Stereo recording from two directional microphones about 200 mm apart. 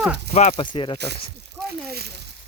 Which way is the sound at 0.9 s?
55° right (ahead or behind).